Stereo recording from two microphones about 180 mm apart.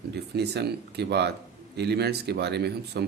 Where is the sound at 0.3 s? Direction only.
65° right (ahead or behind).